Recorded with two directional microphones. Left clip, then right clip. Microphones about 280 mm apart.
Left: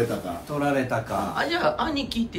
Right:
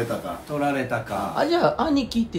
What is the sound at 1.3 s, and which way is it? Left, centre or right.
Speech, centre.